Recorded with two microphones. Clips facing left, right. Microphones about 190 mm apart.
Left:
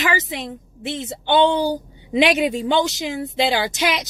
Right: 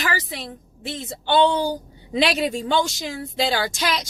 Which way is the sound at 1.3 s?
15° left (ahead or behind).